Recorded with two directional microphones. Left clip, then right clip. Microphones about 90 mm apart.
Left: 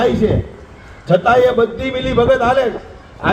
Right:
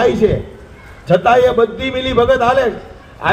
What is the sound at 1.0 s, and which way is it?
A man's voice, 15° left (ahead or behind).